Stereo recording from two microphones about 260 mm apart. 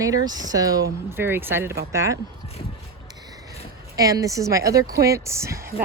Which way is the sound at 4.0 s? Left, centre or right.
Centre.